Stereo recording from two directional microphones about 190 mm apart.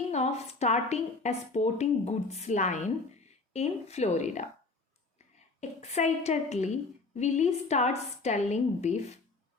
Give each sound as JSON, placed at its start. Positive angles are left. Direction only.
{"t": 0.1, "sound": "a woman's voice", "side_deg": 35}
{"t": 5.5, "sound": "a woman's voice", "side_deg": 35}